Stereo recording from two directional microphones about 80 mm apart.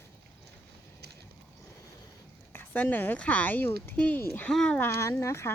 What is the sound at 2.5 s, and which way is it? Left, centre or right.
Speech, left.